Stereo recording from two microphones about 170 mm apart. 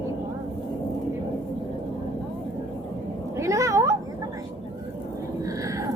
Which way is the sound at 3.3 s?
20° right (ahead or behind).